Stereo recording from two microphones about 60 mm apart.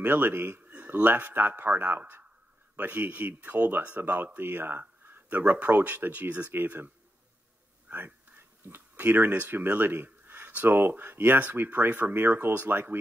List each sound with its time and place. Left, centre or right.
0.0 s a man's voice: right
7.9 s speech: right